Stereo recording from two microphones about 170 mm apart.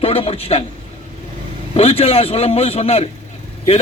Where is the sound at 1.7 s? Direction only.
35° left (ahead or behind).